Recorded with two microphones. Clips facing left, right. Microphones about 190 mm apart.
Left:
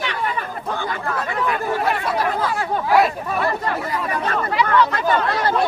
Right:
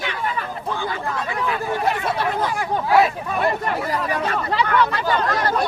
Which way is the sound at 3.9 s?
35° right (ahead or behind).